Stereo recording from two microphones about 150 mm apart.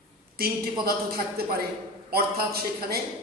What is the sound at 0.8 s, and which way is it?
A man's voice, 85° right.